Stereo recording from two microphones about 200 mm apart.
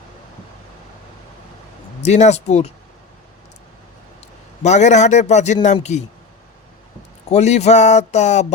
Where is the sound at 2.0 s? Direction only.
35° left (ahead or behind).